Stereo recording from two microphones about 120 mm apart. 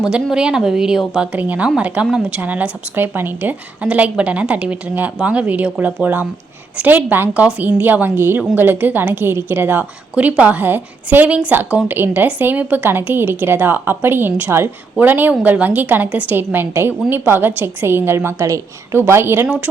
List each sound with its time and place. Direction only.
0.0 s a woman's voice: 5° right (ahead or behind)